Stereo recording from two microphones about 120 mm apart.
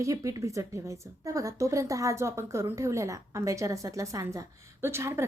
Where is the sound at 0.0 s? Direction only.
25° right (ahead or behind).